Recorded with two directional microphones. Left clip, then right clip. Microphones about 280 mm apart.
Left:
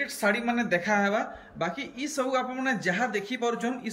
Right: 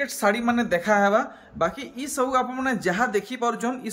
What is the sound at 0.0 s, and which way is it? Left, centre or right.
A man's voice, centre.